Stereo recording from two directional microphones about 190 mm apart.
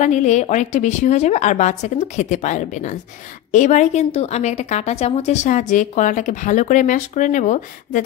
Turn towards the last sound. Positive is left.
turn(degrees=40)  # may be behind; listen again after turning